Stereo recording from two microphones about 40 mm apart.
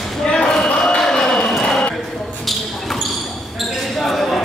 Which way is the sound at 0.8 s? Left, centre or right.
Centre.